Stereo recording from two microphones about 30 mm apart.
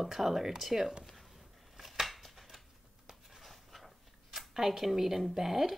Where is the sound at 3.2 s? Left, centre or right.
Centre.